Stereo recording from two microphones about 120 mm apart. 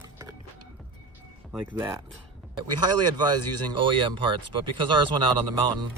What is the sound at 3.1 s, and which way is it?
Speech, 35° right (ahead or behind).